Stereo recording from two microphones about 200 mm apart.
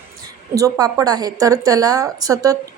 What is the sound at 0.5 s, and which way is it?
A woman's voice, 15° right (ahead or behind).